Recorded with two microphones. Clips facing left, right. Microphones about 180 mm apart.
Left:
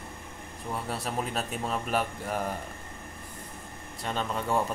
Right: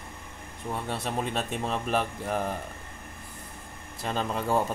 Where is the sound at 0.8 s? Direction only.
Centre (ahead or behind).